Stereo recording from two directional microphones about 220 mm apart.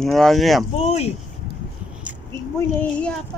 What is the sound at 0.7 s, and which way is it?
Speech, 30° left (ahead or behind).